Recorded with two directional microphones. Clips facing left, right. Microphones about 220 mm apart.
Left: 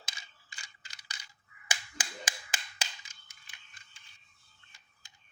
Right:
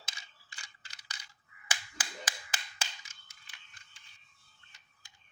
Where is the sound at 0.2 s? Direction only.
15° left (ahead or behind).